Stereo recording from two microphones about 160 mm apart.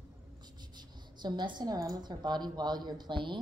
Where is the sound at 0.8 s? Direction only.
25° right (ahead or behind).